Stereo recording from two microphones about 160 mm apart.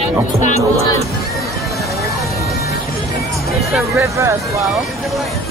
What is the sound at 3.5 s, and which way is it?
Speech, centre (ahead or behind).